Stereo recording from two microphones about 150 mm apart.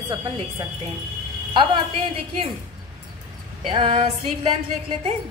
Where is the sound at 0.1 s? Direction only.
25° right (ahead or behind).